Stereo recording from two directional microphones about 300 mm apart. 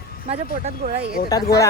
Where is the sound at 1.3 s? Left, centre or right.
Centre.